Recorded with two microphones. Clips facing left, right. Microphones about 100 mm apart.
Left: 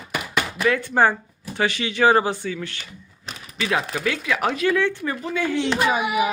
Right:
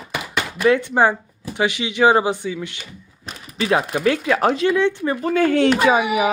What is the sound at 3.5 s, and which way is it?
Speech, 35° right (ahead or behind).